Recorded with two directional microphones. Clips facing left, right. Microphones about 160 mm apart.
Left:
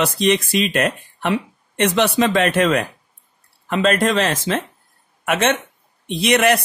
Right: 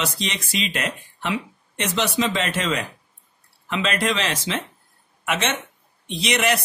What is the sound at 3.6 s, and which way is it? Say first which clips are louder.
Speech: left 6 dB; 50° left (ahead or behind).